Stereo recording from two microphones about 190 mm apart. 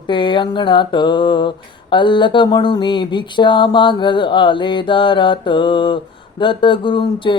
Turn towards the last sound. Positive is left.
turn(degrees=25)  # may be behind; listen again after turning